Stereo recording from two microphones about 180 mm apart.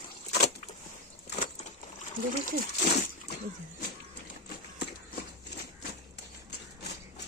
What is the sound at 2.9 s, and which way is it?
Speech, 40° left (ahead or behind).